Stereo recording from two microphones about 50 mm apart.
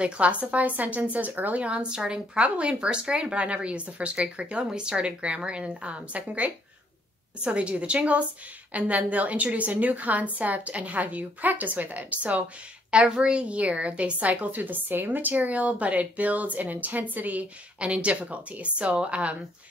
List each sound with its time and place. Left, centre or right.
0.0 s a woman's voice: right
1.6 s a woman's voice: right
12.9 s a woman's voice: centre